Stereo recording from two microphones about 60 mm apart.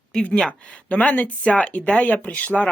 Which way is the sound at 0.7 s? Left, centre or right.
Left.